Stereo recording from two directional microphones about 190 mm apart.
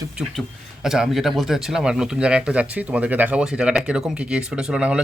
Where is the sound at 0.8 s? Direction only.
Centre (ahead or behind).